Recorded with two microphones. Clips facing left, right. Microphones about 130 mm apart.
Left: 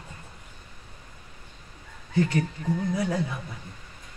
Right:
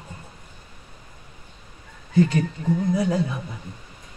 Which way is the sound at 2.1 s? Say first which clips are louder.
Right 5 dB; 20° right (ahead or behind).